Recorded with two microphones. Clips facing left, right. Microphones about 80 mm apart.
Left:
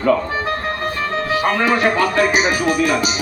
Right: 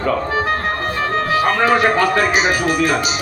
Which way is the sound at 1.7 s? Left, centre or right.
Right.